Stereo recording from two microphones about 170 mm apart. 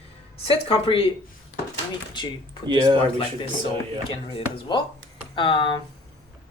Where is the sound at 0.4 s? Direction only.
30° left (ahead or behind).